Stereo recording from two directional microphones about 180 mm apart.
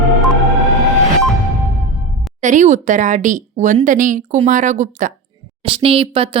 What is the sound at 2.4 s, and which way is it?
A woman's voice, 45° right (ahead or behind).